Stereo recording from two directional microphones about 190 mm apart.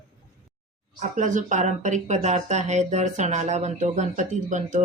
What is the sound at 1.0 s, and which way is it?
Speech, 40° right (ahead or behind).